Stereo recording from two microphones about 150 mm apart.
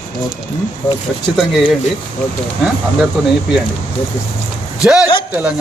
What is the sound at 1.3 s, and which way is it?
Speech, centre (ahead or behind).